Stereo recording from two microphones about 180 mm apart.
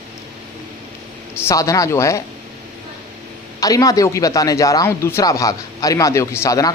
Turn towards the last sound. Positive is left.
turn(degrees=15)  # may be behind; listen again after turning